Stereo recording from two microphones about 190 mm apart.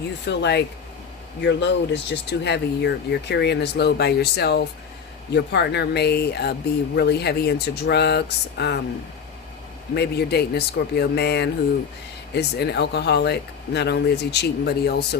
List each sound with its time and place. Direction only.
0.3 s speech: 65° left (ahead or behind)
9.9 s speech: 60° left (ahead or behind)